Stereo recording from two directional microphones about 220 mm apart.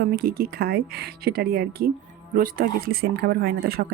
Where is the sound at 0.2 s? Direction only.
45° right (ahead or behind).